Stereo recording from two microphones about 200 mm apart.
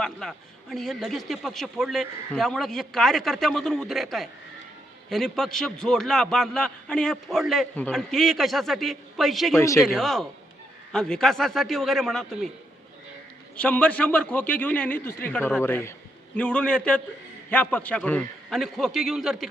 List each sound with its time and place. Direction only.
0.0 s a man's voice: centre (ahead or behind)
9.6 s a man's voice: 15° left (ahead or behind)
9.8 s a man's voice: centre (ahead or behind)
13.6 s a man's voice: 5° left (ahead or behind)